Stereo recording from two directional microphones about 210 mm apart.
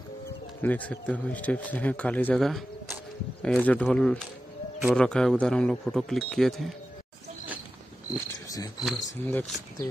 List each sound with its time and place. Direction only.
0.6 s a man's voice: 5° left (ahead or behind)
9.0 s a man's voice: 10° left (ahead or behind)